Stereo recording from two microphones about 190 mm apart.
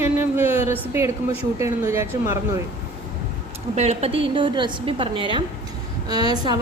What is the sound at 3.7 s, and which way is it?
A woman's voice, 35° right (ahead or behind).